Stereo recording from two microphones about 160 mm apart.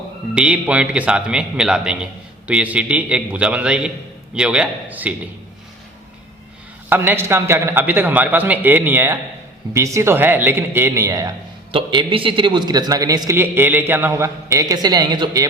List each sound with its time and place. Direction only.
0.3 s a man's voice: 5° right (ahead or behind)
6.9 s a man's voice: 15° right (ahead or behind)
11.7 s a man's voice: 30° right (ahead or behind)